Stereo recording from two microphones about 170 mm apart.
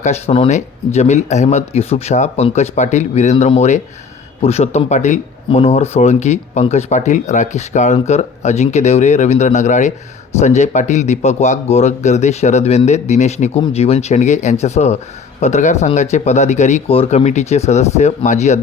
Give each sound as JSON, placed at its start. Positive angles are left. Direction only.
{"t": 0.0, "sound": "speech", "side_deg": 35}